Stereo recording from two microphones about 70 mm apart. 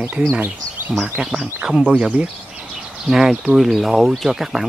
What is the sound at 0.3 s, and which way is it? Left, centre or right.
Speech, right.